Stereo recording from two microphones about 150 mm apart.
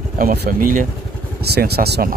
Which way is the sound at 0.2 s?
70° right (ahead or behind).